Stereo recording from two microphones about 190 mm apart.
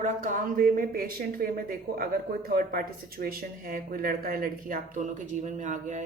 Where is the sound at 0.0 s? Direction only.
45° right (ahead or behind).